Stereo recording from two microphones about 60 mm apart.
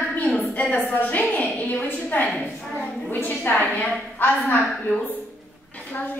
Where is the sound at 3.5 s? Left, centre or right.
Left.